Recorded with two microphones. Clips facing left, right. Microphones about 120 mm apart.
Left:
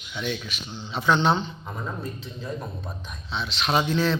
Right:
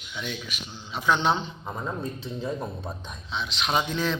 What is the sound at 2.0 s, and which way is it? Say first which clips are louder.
Speech: right 3 dB; centre (ahead or behind).